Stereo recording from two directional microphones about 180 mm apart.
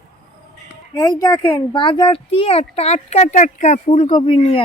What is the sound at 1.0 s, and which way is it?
Speech, 20° left (ahead or behind).